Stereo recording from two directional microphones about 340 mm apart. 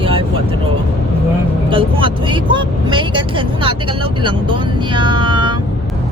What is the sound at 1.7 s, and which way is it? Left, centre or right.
Speech, centre.